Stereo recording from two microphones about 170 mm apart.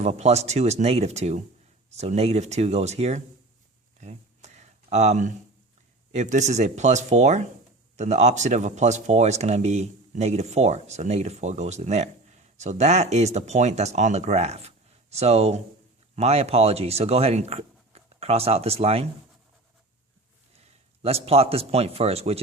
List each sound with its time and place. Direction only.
0.0 s speech: 40° right (ahead or behind)
4.0 s a sound: 40° right (ahead or behind)
6.1 s speech: 45° right (ahead or behind)
21.0 s speech: 35° right (ahead or behind)